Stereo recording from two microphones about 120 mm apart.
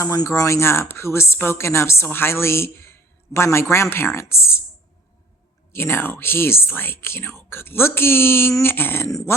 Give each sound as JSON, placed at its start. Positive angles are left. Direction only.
{"t": 0.0, "sound": "a woman's voice", "side_deg": 25}
{"t": 5.7, "sound": "a woman's voice", "side_deg": 20}